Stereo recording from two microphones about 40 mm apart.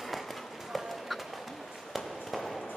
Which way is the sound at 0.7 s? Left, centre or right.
Centre.